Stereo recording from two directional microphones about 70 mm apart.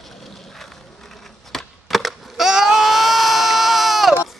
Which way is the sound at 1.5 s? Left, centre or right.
Centre.